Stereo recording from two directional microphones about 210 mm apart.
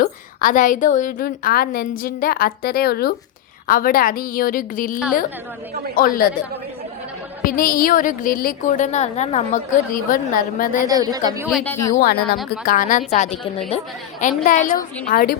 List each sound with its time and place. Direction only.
0.0 s a woman's voice: 40° left (ahead or behind)
6.0 s a woman's voice: 45° left (ahead or behind)
7.4 s a woman's voice: 40° left (ahead or behind)
10.8 s a woman's voice: 15° right (ahead or behind)
11.4 s a woman's voice: 5° left (ahead or behind)
11.9 s a woman's voice: 45° left (ahead or behind)